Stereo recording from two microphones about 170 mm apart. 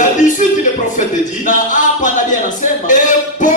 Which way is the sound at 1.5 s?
50° left (ahead or behind).